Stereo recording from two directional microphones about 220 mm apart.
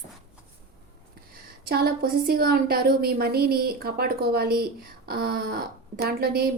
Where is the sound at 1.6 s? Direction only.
45° right (ahead or behind).